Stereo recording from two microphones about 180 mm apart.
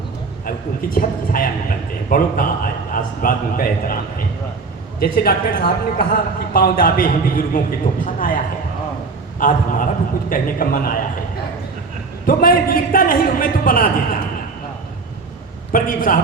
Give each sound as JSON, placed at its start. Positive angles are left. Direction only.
{"t": 0.4, "sound": "a woman's voice", "side_deg": 50}
{"t": 9.4, "sound": "a woman's voice", "side_deg": 50}
{"t": 12.2, "sound": "a woman's voice", "side_deg": 50}
{"t": 15.7, "sound": "a woman's voice", "side_deg": 50}